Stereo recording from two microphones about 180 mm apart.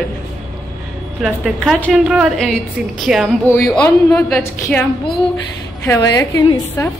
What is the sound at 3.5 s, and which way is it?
Speech, 15° left (ahead or behind).